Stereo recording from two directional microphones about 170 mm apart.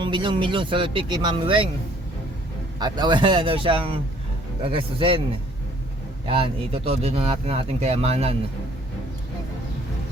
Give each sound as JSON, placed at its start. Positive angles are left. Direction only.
{"t": 0.0, "sound": "speech", "side_deg": -30}
{"t": 2.7, "sound": "speech", "side_deg": -25}
{"t": 6.2, "sound": "speech", "side_deg": -30}